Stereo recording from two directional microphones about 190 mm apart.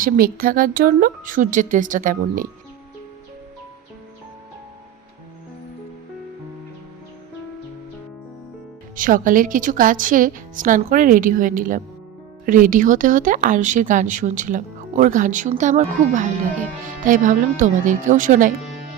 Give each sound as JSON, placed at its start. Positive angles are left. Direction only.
{"t": 0.0, "sound": "speech", "side_deg": -50}
{"t": 9.0, "sound": "speech", "side_deg": -45}